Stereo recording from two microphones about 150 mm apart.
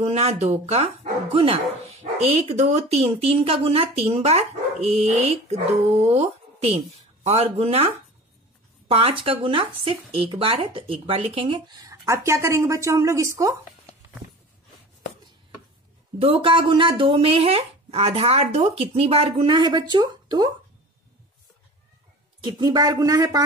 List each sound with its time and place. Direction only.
0.0 s speech: 45° right (ahead or behind)
11.8 s a woman's voice: 20° right (ahead or behind)
16.2 s speech: 40° right (ahead or behind)
22.4 s a woman's voice: 30° right (ahead or behind)